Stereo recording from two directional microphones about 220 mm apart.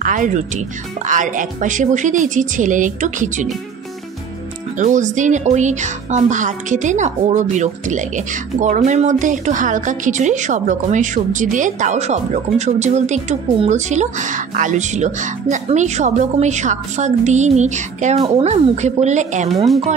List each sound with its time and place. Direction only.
0.0 s speech: 35° right (ahead or behind)
4.7 s speech: 35° right (ahead or behind)
19.5 s speech: centre (ahead or behind)